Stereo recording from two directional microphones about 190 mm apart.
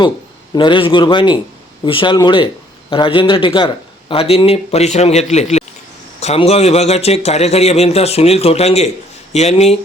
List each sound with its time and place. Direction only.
0.5 s a man's voice: 25° left (ahead or behind)